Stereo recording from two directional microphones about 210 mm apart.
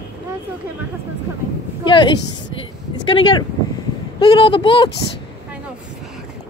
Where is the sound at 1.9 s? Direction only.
20° left (ahead or behind).